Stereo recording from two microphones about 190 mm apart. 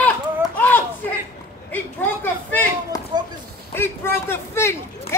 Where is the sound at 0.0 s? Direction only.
10° left (ahead or behind).